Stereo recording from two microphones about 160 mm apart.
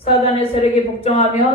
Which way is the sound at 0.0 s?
35° left (ahead or behind).